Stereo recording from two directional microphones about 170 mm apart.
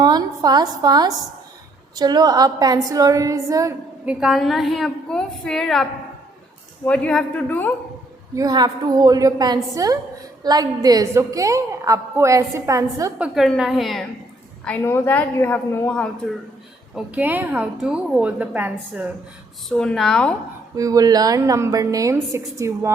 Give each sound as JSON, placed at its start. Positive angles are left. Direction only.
{"t": 0.0, "sound": "a woman's voice", "side_deg": -25}
{"t": 4.0, "sound": "a woman's voice", "side_deg": -5}
{"t": 8.4, "sound": "a woman's voice", "side_deg": -25}
{"t": 13.1, "sound": "a woman's voice", "side_deg": -5}
{"t": 14.6, "sound": "a woman's voice", "side_deg": 10}
{"t": 16.9, "sound": "a woman's voice", "side_deg": -10}
{"t": 19.6, "sound": "a woman's voice", "side_deg": 5}
{"t": 20.7, "sound": "a woman's voice", "side_deg": -20}